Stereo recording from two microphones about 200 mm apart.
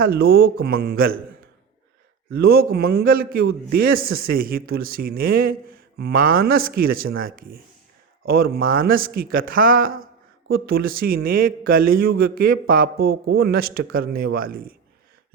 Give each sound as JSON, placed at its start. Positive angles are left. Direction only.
{"t": 0.0, "sound": "a man's voice", "side_deg": -50}